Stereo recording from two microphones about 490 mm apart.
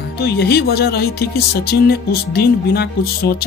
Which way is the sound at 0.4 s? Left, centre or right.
Centre.